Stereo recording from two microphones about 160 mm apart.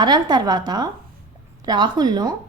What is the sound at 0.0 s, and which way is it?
A woman's voice, 25° right (ahead or behind).